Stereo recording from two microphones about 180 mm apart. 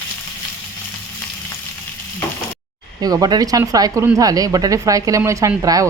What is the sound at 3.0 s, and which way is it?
Speech, 20° right (ahead or behind).